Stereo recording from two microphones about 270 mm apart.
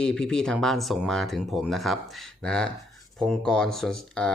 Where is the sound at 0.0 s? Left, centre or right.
Centre.